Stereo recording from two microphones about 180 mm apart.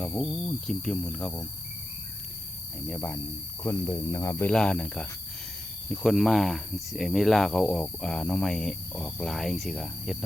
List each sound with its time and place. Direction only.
0.0 s speech: centre (ahead or behind)
2.8 s speech: 5° left (ahead or behind)